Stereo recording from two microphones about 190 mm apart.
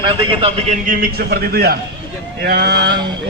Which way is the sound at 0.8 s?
50° right (ahead or behind).